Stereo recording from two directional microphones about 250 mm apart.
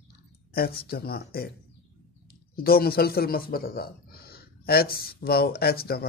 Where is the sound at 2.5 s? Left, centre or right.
Left.